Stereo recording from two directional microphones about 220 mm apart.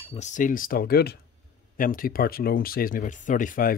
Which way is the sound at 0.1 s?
35° left (ahead or behind).